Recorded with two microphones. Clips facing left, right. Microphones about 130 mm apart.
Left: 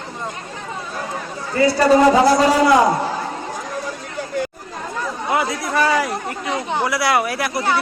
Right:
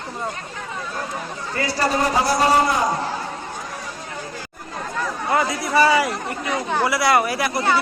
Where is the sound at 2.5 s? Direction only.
85° left.